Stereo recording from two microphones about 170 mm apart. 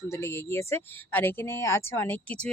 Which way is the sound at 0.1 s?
15° left (ahead or behind).